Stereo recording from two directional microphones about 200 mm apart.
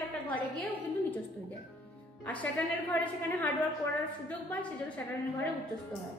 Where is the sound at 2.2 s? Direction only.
10° left (ahead or behind).